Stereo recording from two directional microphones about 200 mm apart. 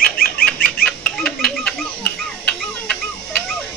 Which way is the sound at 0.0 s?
45° left (ahead or behind).